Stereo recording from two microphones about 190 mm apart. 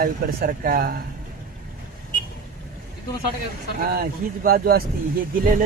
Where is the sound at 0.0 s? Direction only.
50° right (ahead or behind).